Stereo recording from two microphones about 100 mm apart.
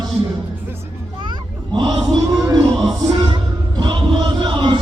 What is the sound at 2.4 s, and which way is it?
Music, 35° right (ahead or behind).